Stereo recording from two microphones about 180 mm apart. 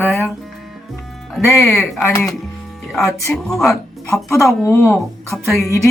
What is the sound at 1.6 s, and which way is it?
Speech, 5° left (ahead or behind).